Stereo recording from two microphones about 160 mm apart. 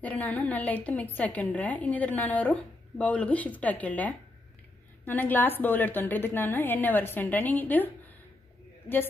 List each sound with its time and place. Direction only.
0.0 s a woman's voice: 10° left (ahead or behind)